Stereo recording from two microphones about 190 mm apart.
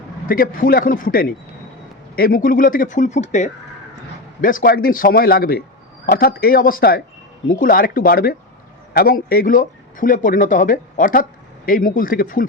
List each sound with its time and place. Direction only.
0.3 s speech: 45° left (ahead or behind)